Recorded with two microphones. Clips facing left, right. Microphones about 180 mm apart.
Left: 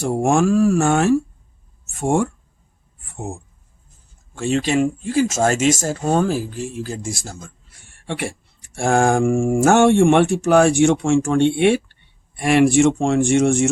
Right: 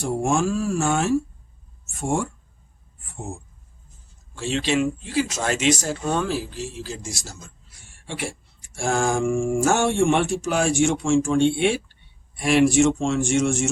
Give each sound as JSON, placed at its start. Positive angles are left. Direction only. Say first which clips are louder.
{"t": 0.2, "sound": "speech", "louder": "left 8 dB", "side_deg": 60}
{"t": 4.4, "sound": "speech", "louder": "left 4 dB", "side_deg": 50}